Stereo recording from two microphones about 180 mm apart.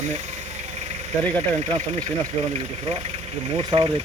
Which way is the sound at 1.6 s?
35° right (ahead or behind).